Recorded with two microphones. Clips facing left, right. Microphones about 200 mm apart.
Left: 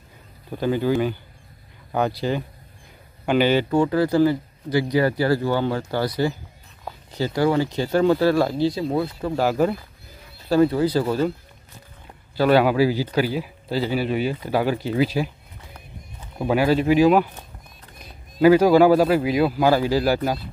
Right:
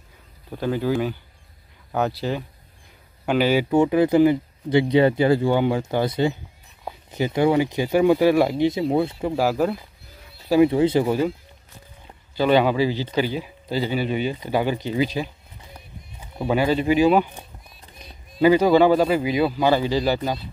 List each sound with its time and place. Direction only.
0.5 s a man's voice: centre (ahead or behind)
3.7 s speech: 20° right (ahead or behind)
9.3 s a man's voice: 5° right (ahead or behind)
10.5 s speech: 15° right (ahead or behind)
12.4 s a man's voice: 5° left (ahead or behind)
15.7 s run: 10° right (ahead or behind)
16.4 s a man's voice: 5° left (ahead or behind)
18.4 s a man's voice: 5° left (ahead or behind)